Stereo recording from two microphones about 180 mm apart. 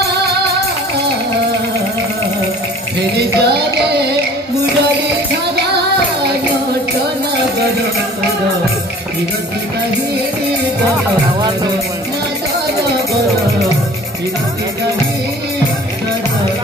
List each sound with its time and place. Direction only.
3.2 s music: 65° right (ahead or behind)